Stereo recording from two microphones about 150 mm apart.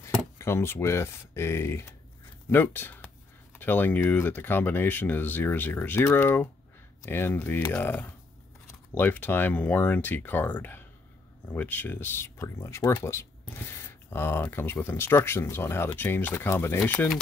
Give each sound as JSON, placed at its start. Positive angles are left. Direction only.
{"t": 0.4, "sound": "speech", "side_deg": 15}